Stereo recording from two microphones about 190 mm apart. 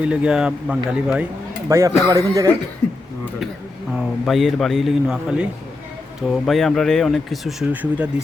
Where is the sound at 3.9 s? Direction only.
Centre (ahead or behind).